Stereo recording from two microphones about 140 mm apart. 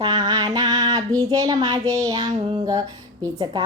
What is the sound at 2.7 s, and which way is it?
Speech, 25° right (ahead or behind).